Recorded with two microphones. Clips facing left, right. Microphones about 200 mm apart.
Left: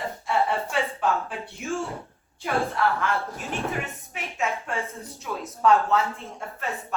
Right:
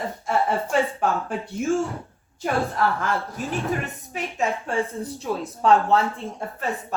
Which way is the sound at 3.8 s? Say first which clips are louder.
Right 5 dB; 35° right (ahead or behind).